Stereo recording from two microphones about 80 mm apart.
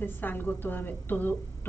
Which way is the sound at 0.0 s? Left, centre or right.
Left.